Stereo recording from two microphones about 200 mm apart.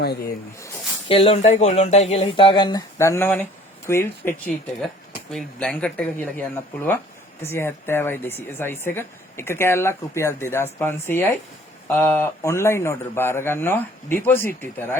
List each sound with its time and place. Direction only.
0.0 s speech: 55° left (ahead or behind)
1.0 s speech: 25° left (ahead or behind); by 6.4 s 10° left (ahead or behind)
7.4 s speech: 10° left (ahead or behind)